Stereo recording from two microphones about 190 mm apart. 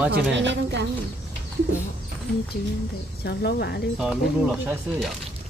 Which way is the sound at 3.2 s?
60° left (ahead or behind).